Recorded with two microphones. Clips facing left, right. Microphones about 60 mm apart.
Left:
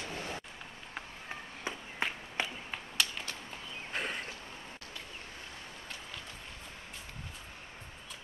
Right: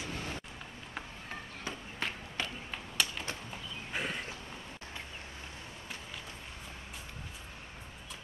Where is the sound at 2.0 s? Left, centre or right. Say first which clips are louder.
Left 3 dB; centre.